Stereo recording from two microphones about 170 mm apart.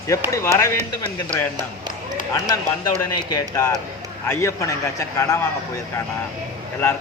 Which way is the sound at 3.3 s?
20° left (ahead or behind).